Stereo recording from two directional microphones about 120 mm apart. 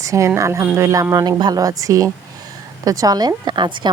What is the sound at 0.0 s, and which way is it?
A woman's voice, 25° right (ahead or behind).